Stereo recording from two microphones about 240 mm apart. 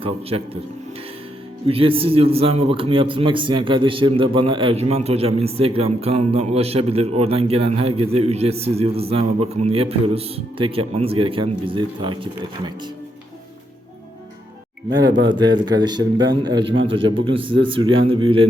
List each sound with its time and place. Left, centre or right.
0.0 s a man's voice: right
1.6 s a man's voice: right
15.3 s a man's voice: centre